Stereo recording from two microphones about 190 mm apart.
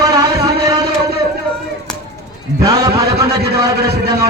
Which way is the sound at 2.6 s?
20° right (ahead or behind).